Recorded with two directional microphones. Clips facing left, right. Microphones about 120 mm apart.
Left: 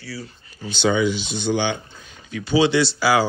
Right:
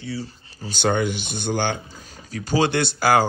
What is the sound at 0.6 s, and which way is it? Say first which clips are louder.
Speech: left 2 dB; 50° right (ahead or behind).